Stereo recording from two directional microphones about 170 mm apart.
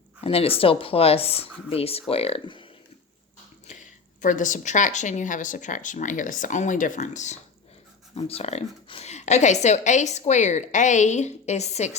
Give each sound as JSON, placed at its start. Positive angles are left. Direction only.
{"t": 0.2, "sound": "a woman's voice", "side_deg": 35}
{"t": 3.7, "sound": "a woman's voice", "side_deg": 50}